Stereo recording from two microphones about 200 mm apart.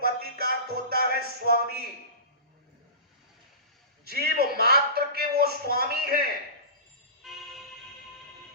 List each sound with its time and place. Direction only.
0.0 s music: 50° right (ahead or behind)
4.0 s a man's voice: 50° right (ahead or behind)
7.2 s a sound: centre (ahead or behind)